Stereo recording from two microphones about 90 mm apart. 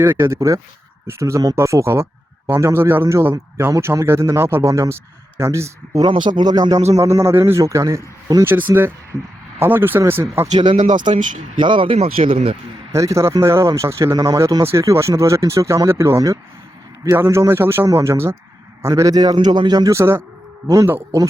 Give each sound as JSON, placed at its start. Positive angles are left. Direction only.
{"t": 0.0, "sound": "speech", "side_deg": -25}
{"t": 6.1, "sound": "speech", "side_deg": -55}
{"t": 8.4, "sound": "speech", "side_deg": -20}
{"t": 9.1, "sound": "a man's voice", "side_deg": -40}
{"t": 9.6, "sound": "speech", "side_deg": -25}
{"t": 11.5, "sound": "speech", "side_deg": -65}
{"t": 12.9, "sound": "a man's voice", "side_deg": -35}
{"t": 19.9, "sound": "speech", "side_deg": -30}